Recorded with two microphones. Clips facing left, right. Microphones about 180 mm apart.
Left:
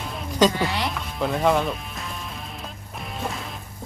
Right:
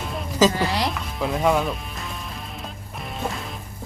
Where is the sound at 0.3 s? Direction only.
5° right (ahead or behind).